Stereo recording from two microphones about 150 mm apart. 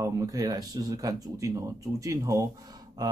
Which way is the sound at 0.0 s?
25° right (ahead or behind).